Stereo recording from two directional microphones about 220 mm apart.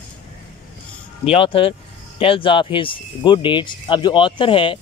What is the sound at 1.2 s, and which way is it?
Speech, 25° left (ahead or behind).